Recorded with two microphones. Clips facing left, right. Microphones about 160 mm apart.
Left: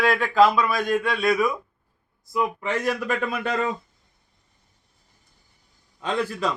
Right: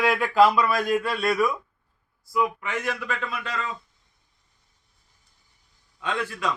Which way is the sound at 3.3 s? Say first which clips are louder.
Left 6 dB; 50° left (ahead or behind).